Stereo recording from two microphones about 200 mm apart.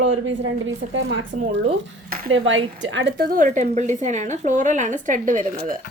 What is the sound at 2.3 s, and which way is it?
Speech, 70° right (ahead or behind).